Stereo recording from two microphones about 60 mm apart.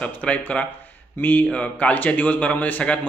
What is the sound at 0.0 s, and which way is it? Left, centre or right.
A man's voice, left.